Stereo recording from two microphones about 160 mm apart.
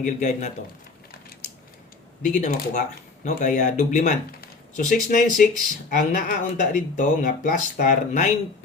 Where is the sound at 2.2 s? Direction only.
50° left (ahead or behind).